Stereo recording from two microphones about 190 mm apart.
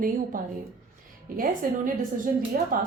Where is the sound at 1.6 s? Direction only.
45° right (ahead or behind).